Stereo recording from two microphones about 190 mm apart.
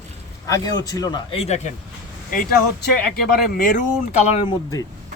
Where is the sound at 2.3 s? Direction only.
45° left (ahead or behind).